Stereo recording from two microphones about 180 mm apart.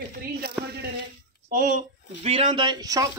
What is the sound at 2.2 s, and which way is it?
Speech, 30° right (ahead or behind).